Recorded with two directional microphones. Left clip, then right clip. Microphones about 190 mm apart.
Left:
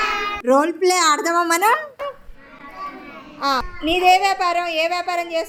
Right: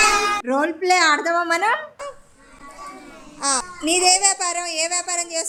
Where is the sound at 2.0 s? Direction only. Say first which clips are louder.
Left 5 dB; centre (ahead or behind).